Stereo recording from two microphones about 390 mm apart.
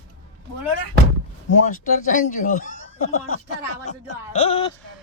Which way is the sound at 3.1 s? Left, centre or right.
Left.